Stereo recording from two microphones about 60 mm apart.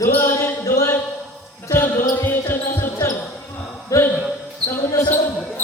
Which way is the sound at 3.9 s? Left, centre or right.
Left.